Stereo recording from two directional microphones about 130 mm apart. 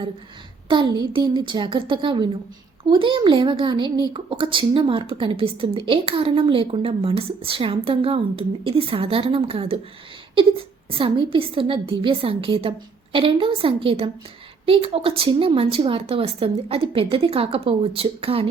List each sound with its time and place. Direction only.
0.7 s a child's voice: 40° right (ahead or behind)
10.9 s a woman's voice: 40° right (ahead or behind)